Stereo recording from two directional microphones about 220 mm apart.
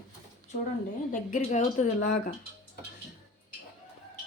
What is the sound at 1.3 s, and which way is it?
A woman's voice, 35° left (ahead or behind).